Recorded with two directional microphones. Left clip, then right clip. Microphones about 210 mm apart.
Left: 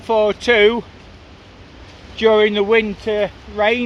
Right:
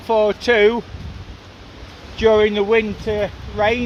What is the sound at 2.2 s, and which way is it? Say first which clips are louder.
Speech: left 1 dB; 20° left (ahead or behind).